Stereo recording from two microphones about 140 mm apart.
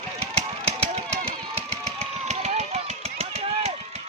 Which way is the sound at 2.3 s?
50° right (ahead or behind).